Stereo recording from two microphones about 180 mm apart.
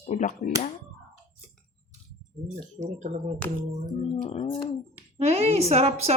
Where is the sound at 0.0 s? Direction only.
40° left (ahead or behind).